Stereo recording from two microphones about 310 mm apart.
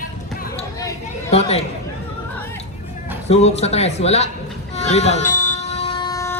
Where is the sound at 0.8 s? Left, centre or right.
Centre.